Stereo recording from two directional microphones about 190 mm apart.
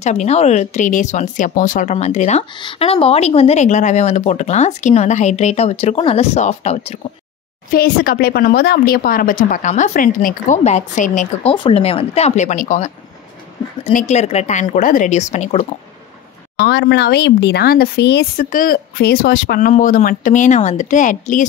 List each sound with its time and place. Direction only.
0.0 s speech: 35° left (ahead or behind)
2.5 s speech: 25° left (ahead or behind)
7.7 s a woman's voice: 50° left (ahead or behind)
11.5 s speech: 30° left (ahead or behind)
16.5 s speech: 55° left (ahead or behind)
19.7 s speech: 40° left (ahead or behind)